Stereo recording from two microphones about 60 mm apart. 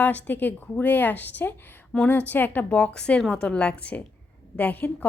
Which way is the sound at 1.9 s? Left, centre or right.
Centre.